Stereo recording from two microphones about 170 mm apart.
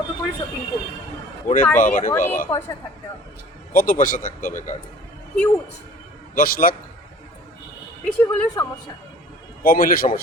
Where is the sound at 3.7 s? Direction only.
55° left (ahead or behind).